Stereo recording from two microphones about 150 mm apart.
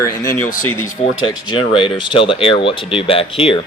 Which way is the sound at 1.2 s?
35° left (ahead or behind).